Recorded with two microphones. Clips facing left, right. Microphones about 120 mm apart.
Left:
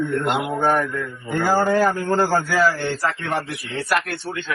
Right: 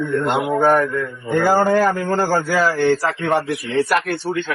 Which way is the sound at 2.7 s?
80° right.